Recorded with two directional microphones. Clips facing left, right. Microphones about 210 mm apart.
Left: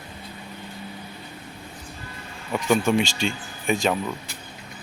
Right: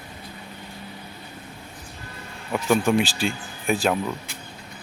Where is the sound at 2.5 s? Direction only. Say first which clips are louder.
Even; 5° right (ahead or behind).